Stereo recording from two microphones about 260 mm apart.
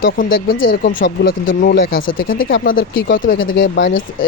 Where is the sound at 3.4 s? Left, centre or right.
Left.